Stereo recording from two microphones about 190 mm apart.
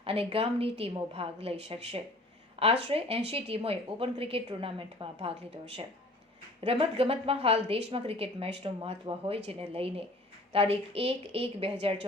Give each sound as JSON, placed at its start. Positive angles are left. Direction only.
{"t": 0.0, "sound": "a woman's voice", "side_deg": -30}
{"t": 6.7, "sound": "a woman's voice", "side_deg": -30}